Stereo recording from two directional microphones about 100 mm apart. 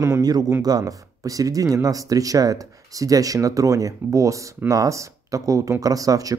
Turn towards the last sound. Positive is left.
turn(degrees=-35)  # may be behind; listen again after turning